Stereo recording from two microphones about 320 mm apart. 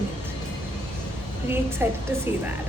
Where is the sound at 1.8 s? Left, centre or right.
Centre.